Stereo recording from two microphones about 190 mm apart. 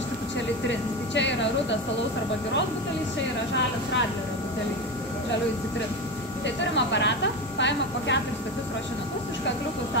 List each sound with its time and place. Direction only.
0.7 s speech: 70° left (ahead or behind)
6.4 s speech: 70° left (ahead or behind)